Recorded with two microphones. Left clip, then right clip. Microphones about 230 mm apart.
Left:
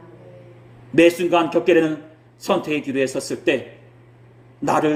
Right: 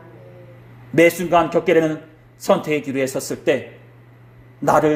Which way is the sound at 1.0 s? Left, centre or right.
Right.